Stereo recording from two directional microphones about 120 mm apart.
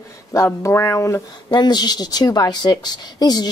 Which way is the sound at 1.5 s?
35° left (ahead or behind).